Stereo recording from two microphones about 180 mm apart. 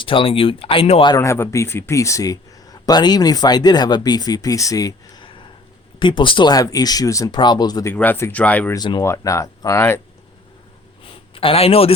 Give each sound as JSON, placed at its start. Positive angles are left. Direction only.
{"t": 0.0, "sound": "speech", "side_deg": 30}
{"t": 8.7, "sound": "speech", "side_deg": 25}
{"t": 11.0, "sound": "a sound", "side_deg": 30}